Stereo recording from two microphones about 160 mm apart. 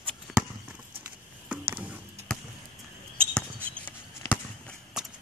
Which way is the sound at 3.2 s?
5° left (ahead or behind).